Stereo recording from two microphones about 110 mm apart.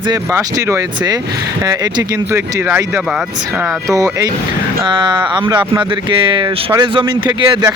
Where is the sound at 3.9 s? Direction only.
30° right (ahead or behind).